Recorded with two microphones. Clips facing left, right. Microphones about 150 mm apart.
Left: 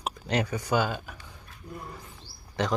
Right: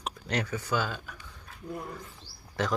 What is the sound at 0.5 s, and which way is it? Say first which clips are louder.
Speech: left 4 dB; 15° left (ahead or behind).